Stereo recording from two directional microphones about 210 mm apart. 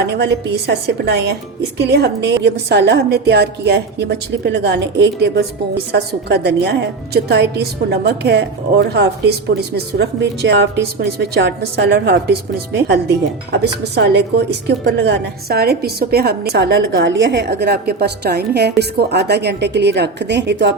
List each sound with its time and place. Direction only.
0.0 s a woman's voice: 50° right (ahead or behind)